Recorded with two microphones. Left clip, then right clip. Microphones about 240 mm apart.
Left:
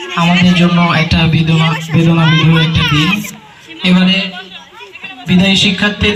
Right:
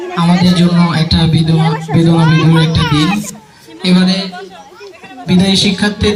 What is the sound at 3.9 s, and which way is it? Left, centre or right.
Speech, left.